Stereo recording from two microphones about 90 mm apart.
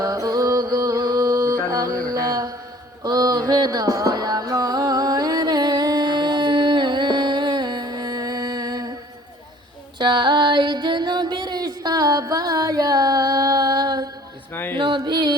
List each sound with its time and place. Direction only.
0.0 s music: 40° right (ahead or behind)
10.0 s music: 55° right (ahead or behind)
14.5 s music: 25° left (ahead or behind)
14.8 s music: 60° right (ahead or behind)